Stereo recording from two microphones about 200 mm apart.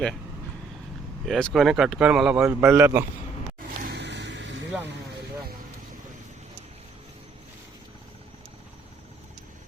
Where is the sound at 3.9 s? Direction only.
60° right (ahead or behind).